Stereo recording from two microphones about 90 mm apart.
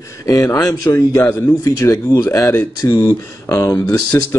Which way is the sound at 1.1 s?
35° left (ahead or behind).